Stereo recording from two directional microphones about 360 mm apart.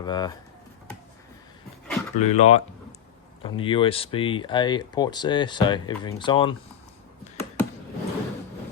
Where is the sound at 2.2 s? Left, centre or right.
Centre.